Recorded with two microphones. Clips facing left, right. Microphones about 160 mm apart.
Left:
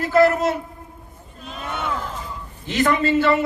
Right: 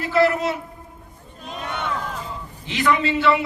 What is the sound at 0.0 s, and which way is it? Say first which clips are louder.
Speech: left 3 dB; 45° left (ahead or behind).